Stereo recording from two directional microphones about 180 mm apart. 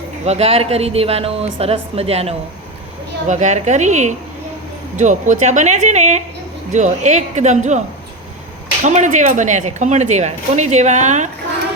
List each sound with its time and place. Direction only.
0.3 s speech: 35° right (ahead or behind)
8.8 s speech: 45° right (ahead or behind)